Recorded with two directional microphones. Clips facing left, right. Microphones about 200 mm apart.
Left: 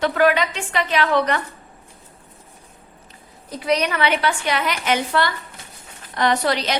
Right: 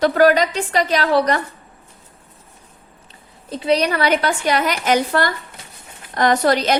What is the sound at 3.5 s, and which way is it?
A woman's voice, 30° right (ahead or behind).